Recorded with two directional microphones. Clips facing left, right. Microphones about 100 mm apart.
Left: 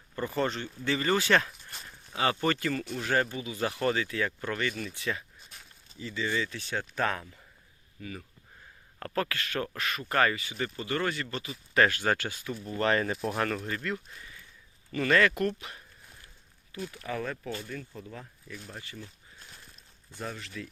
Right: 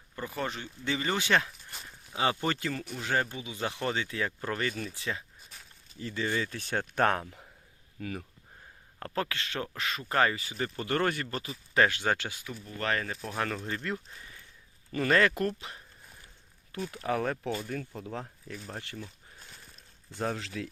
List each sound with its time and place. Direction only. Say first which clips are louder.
0.2 s speech: left 5 dB; 10° right (ahead or behind)
1.5 s a sound: even; centre (ahead or behind)
2.1 s speech: left 1 dB; 15° right (ahead or behind)
6.0 s speech: even; 50° right (ahead or behind)
9.0 s speech: left 1 dB; 25° right (ahead or behind)
10.6 s speech: right 2 dB; 50° right (ahead or behind)
11.7 s speech: left 1 dB; 20° right (ahead or behind)
12.6 s speech: left 5 dB; 10° left (ahead or behind)
13.7 s speech: left 1 dB; 25° right (ahead or behind)
16.7 s speech: right 4 dB; 70° right (ahead or behind); by 18.5 s 85° right
20.1 s speech: right 5 dB; 85° right